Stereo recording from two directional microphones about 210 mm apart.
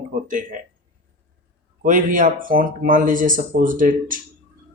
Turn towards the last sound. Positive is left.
turn(degrees=-40)  # may be behind; listen again after turning